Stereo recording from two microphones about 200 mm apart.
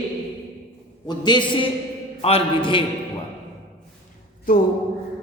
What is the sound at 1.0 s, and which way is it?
A woman's voice, 20° left (ahead or behind).